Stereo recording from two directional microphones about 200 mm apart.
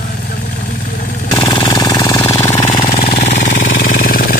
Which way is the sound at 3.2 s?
35° left (ahead or behind).